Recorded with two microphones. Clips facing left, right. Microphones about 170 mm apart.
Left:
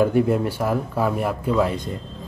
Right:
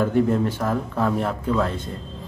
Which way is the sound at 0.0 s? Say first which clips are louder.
Left 1 dB; 10° left (ahead or behind).